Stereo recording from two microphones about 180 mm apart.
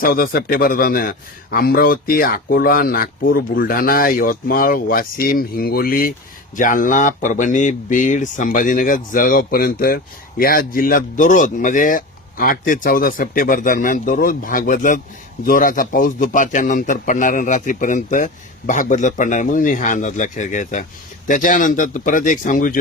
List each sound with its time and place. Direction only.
0.0 s speech: 55° left (ahead or behind)